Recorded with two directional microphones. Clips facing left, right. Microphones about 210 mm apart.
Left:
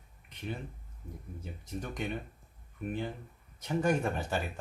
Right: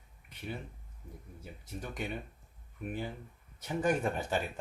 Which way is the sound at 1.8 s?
10° right (ahead or behind).